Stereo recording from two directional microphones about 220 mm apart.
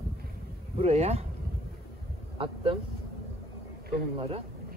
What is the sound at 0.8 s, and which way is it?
Speech, 30° right (ahead or behind).